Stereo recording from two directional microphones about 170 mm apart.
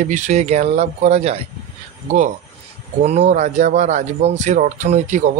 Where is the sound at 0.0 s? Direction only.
40° right (ahead or behind).